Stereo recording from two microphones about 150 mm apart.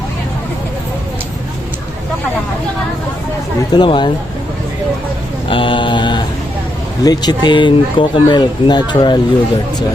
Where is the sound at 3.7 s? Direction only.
30° left (ahead or behind).